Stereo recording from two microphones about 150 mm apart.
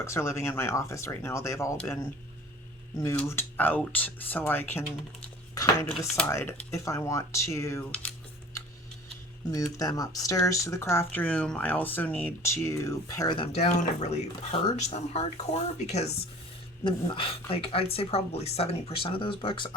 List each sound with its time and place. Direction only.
0.0 s speech: 20° left (ahead or behind)
3.2 s speech: 15° left (ahead or behind)
9.5 s speech: 25° left (ahead or behind)
13.3 s speech: 40° left (ahead or behind)